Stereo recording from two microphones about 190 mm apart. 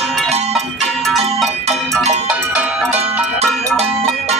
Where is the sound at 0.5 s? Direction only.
Centre (ahead or behind).